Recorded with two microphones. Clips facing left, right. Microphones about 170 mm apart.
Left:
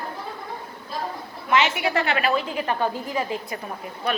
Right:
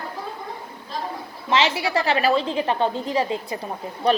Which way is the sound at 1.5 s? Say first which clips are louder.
Even; 30° right (ahead or behind).